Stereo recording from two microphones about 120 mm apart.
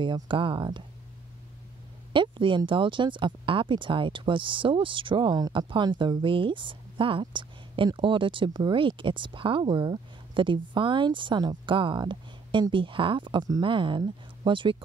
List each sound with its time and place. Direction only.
0.0 s speech: 45° right (ahead or behind)
2.1 s speech: 45° right (ahead or behind)